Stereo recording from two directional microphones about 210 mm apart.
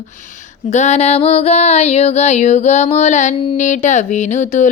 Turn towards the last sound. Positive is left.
turn(degrees=35)  # may be behind; listen again after turning